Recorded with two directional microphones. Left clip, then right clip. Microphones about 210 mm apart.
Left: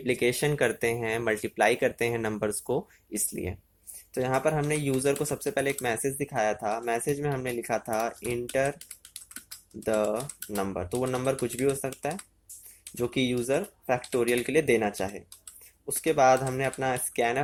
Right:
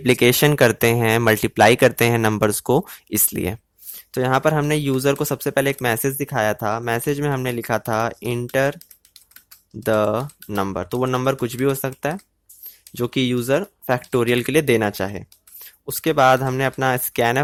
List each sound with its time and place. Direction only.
0.0 s speech: 40° right (ahead or behind)
9.8 s speech: 40° right (ahead or behind)